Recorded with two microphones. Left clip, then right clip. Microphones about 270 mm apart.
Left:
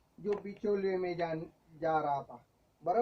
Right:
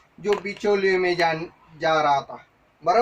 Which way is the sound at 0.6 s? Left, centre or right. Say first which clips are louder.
Right 12 dB; centre.